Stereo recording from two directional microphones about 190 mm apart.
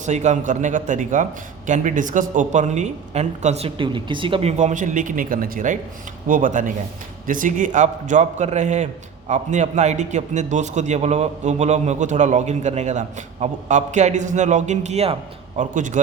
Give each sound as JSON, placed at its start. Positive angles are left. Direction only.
{"t": 0.0, "sound": "a man's voice", "side_deg": -40}